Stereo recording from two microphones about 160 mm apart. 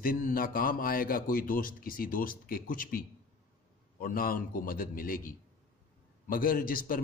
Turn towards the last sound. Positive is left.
turn(degrees=60)  # may be behind; listen again after turning